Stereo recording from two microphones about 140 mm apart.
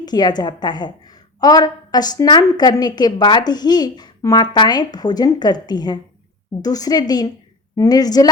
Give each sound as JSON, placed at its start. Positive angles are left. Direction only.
{"t": 0.0, "sound": "a woman's voice", "side_deg": 30}